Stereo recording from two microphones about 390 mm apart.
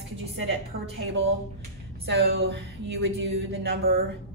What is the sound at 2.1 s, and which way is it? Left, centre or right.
Speech, right.